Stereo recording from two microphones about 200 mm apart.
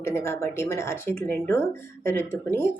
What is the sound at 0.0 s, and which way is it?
Speech, 15° left (ahead or behind).